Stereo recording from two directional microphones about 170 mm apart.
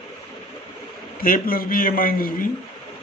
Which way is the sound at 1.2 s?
55° left (ahead or behind).